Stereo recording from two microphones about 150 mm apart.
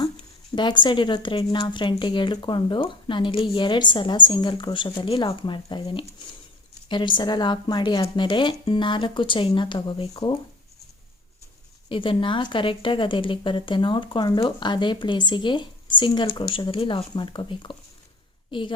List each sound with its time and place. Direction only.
0.5 s a woman's voice: 30° left (ahead or behind)
11.9 s a woman's voice: 35° left (ahead or behind)